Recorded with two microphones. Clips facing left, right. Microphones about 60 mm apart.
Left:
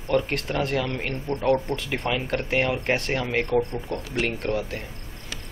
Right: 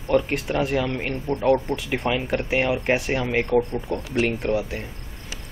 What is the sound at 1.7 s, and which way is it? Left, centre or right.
Speech, centre.